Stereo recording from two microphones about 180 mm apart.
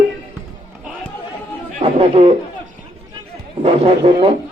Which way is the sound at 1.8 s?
35° right (ahead or behind).